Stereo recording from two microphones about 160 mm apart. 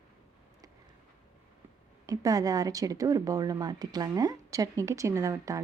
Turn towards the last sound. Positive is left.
turn(degrees=-20)  # may be behind; listen again after turning